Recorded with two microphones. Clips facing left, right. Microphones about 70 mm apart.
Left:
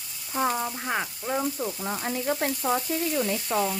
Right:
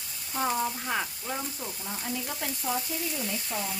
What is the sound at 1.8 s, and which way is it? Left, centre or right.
Speech, left.